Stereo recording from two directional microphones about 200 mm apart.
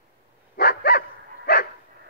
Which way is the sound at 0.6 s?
55° left (ahead or behind).